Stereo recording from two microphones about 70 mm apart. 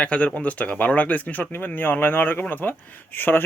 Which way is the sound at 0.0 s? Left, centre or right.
Centre.